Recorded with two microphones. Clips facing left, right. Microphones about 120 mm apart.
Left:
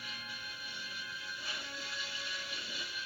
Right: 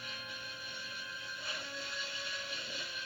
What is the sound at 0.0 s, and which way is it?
Music, 5° left (ahead or behind).